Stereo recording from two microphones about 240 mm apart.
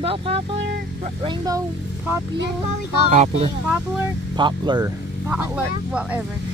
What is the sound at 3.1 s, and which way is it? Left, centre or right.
Speech, right.